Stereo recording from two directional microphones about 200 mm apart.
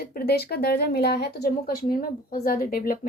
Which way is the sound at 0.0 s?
50° left (ahead or behind).